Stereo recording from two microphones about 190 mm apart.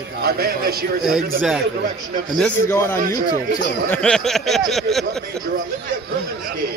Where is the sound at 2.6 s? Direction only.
15° left (ahead or behind).